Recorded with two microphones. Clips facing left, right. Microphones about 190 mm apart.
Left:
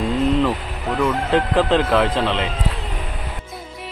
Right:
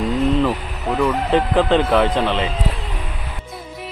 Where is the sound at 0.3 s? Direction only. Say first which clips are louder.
Even; centre (ahead or behind).